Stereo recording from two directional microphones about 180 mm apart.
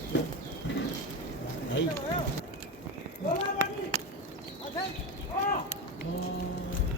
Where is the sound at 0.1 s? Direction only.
90° left.